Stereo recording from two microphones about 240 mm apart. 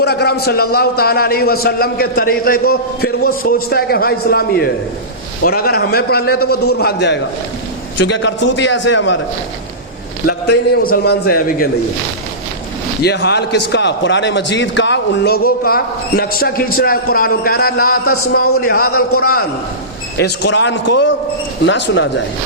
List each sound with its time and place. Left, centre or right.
0.0 s a man's voice: left
10.2 s a man's voice: left
13.0 s a man's voice: left
18.0 s a man's voice: left
18.6 s a man's voice: left